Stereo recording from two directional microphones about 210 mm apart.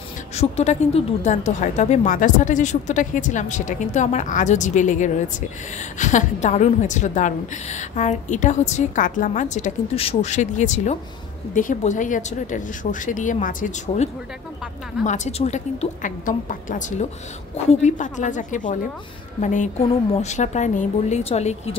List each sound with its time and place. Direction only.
0.3 s a woman's voice: 30° left (ahead or behind)
15.0 s a woman's voice: 35° left (ahead or behind)